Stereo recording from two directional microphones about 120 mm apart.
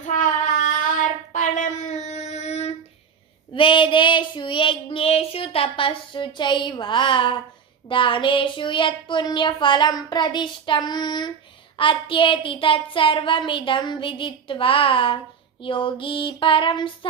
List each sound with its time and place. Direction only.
0.0 s child singing: 90° left; by 2.7 s 65° left (ahead or behind)
3.5 s child singing: 45° left (ahead or behind)
7.9 s a sound: 45° left (ahead or behind)
11.8 s speech: 45° left (ahead or behind)